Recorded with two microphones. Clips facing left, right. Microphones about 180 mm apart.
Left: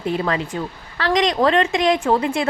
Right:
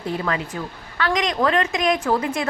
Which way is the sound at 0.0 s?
25° left (ahead or behind).